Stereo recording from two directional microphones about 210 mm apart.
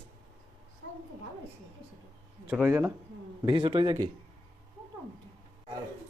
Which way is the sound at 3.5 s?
25° right (ahead or behind).